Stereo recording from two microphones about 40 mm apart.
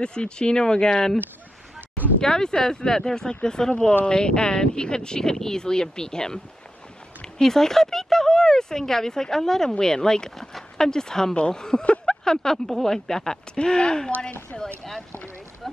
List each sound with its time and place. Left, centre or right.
0.0 s speech: left
2.1 s speech: centre
13.6 s speech: left
15.6 s a sound: centre